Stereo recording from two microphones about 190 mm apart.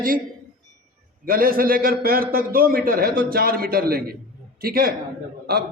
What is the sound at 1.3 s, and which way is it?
A man's voice, 50° right (ahead or behind).